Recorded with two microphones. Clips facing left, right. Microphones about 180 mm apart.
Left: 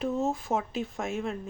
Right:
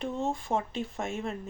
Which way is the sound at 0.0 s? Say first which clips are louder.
Left 3 dB; 5° left (ahead or behind).